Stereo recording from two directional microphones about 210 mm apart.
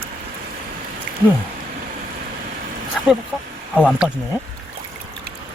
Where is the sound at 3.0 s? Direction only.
Centre (ahead or behind).